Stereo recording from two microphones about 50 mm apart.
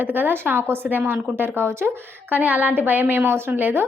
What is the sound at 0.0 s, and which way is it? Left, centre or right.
Speech, right.